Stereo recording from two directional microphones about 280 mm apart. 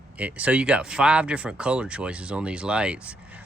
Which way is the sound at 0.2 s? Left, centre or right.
Centre.